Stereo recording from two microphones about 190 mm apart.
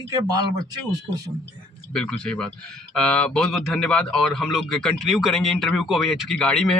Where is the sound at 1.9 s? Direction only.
5° left (ahead or behind).